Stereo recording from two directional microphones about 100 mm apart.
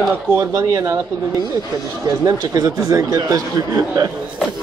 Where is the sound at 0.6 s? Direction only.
30° right (ahead or behind).